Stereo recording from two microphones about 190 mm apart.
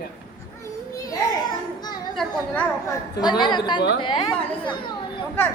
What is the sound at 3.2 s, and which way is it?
A woman's voice, 20° left (ahead or behind).